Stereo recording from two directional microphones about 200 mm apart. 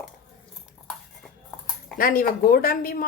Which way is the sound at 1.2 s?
Centre (ahead or behind).